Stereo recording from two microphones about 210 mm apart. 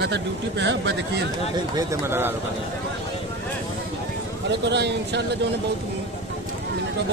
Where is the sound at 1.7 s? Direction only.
15° right (ahead or behind).